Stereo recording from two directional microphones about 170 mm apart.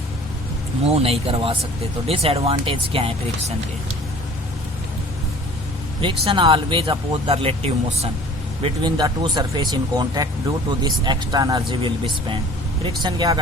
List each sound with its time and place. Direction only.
0.9 s speech: 35° right (ahead or behind)
6.0 s speech: 30° right (ahead or behind)
8.6 s speech: 25° right (ahead or behind)